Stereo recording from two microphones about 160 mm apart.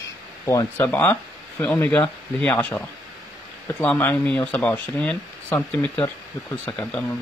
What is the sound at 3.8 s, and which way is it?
Speech, 10° left (ahead or behind).